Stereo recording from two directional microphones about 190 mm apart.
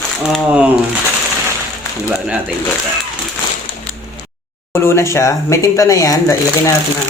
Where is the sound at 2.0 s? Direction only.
5° right (ahead or behind).